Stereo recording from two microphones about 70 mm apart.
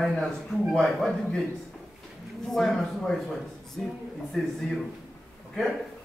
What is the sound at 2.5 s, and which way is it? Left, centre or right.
Speech, centre.